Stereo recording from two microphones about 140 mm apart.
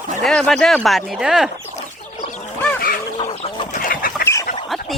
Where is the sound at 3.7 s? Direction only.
80° left.